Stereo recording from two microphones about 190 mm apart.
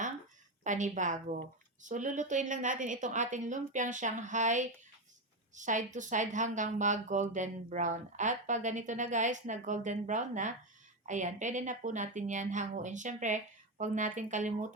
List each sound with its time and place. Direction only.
0.6 s a woman's voice: 40° right (ahead or behind)